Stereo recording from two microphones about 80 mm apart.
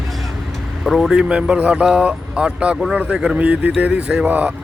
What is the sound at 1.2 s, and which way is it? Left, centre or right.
Speech, centre.